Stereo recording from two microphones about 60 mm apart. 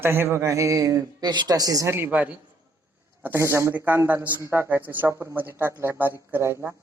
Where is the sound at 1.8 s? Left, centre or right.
Right.